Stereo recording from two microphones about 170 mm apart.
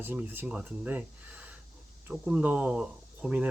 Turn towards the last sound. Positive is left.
turn(degrees=-5)  # may be behind; listen again after turning